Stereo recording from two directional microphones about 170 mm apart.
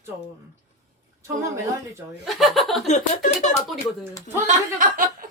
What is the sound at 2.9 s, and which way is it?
Speech, 45° left (ahead or behind).